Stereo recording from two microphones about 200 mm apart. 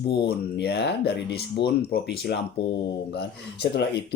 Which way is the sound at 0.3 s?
55° left (ahead or behind).